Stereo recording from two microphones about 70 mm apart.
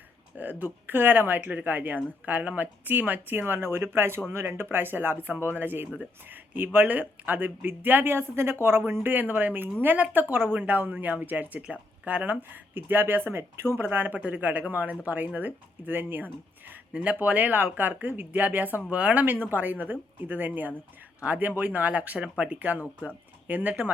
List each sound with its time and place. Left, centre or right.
0.3 s speech: right